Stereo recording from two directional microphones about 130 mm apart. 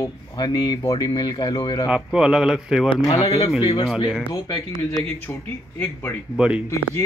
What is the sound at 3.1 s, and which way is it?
Speech, 50° left (ahead or behind).